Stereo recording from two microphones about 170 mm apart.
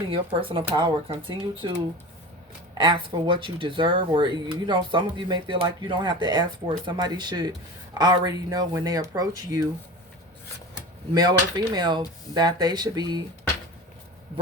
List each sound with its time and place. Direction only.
0.1 s speech: 30° right (ahead or behind)
11.1 s speech: 25° right (ahead or behind)